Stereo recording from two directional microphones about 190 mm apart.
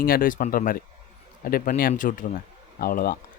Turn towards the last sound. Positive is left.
turn(degrees=50)  # may be behind; listen again after turning